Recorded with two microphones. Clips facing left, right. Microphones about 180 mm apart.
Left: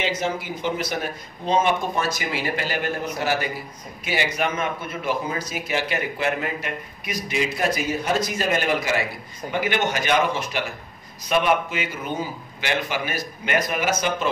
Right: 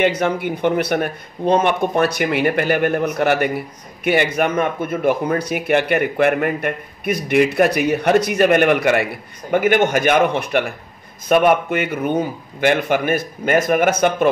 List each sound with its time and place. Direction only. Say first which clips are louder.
0.0 s speech: right 8 dB; 60° right (ahead or behind)